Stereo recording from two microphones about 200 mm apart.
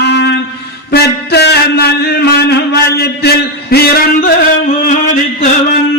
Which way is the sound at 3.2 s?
50° left (ahead or behind).